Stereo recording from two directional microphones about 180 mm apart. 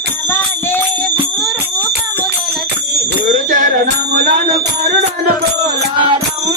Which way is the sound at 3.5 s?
65° right (ahead or behind).